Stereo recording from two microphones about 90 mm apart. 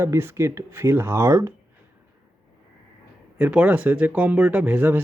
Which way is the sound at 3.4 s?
20° right (ahead or behind).